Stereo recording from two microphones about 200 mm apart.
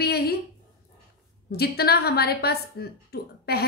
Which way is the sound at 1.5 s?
50° left (ahead or behind).